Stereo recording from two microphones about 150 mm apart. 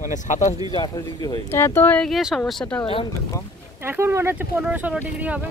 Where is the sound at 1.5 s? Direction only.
15° left (ahead or behind).